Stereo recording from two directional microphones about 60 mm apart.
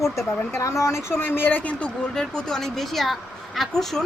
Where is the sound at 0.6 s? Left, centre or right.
Left.